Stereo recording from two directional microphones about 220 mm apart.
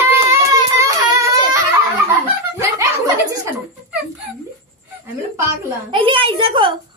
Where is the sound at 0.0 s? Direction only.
15° right (ahead or behind).